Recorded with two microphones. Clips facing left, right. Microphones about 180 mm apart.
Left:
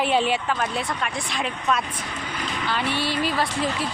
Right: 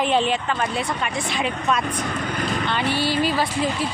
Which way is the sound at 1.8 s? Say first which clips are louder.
Right 7 dB; 50° right (ahead or behind).